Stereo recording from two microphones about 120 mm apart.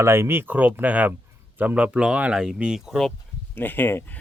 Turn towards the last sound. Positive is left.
turn(degrees=15)  # may be behind; listen again after turning